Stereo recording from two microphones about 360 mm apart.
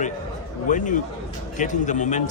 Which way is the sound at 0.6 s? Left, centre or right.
Left.